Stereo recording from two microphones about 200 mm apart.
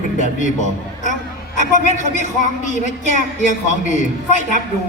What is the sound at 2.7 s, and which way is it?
Speech, 40° left (ahead or behind).